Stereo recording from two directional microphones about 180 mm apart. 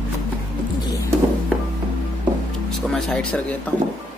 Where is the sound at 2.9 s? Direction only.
5° left (ahead or behind).